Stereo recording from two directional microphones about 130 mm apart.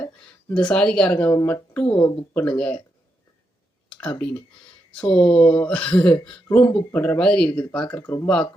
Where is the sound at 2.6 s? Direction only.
10° left (ahead or behind).